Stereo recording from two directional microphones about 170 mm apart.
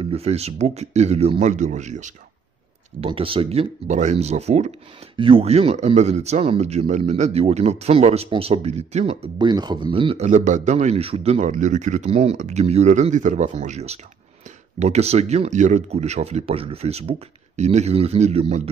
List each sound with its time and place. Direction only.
0.0 s speech: 35° right (ahead or behind)
3.0 s speech: 30° right (ahead or behind)